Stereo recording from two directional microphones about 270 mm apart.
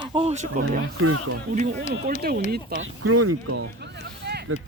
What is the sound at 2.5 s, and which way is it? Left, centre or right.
Speech, right.